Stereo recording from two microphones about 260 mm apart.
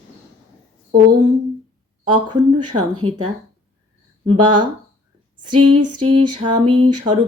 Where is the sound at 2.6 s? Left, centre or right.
Right.